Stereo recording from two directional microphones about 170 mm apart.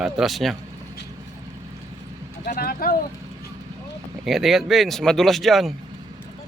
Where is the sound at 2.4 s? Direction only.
60° left (ahead or behind).